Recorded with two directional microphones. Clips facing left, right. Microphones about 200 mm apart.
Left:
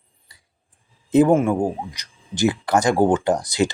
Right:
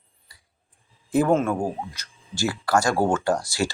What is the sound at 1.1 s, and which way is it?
Speech, 15° left (ahead or behind).